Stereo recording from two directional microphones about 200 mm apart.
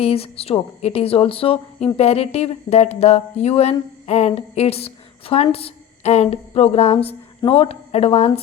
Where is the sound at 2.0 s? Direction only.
30° left (ahead or behind).